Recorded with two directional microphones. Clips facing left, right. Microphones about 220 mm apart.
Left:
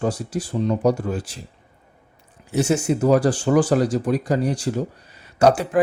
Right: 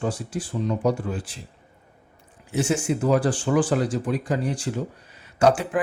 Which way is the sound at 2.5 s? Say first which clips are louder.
Left 4 dB; 40° left (ahead or behind).